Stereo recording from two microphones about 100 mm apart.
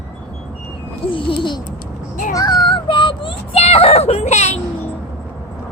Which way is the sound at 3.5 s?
80° left.